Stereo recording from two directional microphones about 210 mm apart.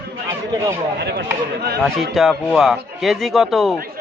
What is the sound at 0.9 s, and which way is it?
Speech, 50° right (ahead or behind).